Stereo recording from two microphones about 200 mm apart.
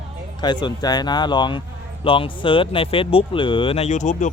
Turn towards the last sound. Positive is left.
turn(degrees=35)  # may be behind; listen again after turning